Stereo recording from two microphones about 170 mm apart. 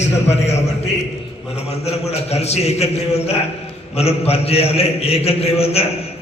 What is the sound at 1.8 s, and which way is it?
A man's voice, 40° left (ahead or behind).